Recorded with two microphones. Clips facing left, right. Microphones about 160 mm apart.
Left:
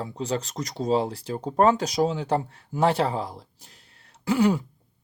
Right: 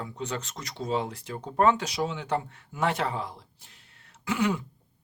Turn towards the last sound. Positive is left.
turn(degrees=35)  # may be behind; listen again after turning